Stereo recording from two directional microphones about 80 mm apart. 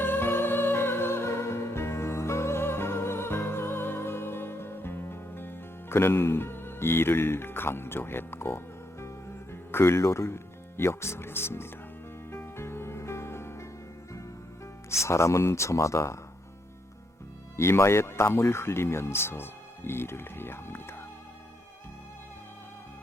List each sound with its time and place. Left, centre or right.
0.0 s music: left
14.8 s speech: left
17.6 s speech: left